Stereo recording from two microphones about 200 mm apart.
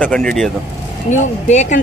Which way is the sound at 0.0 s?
5° left (ahead or behind).